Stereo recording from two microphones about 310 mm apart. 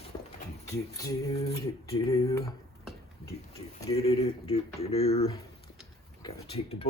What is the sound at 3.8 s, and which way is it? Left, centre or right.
Speech, centre.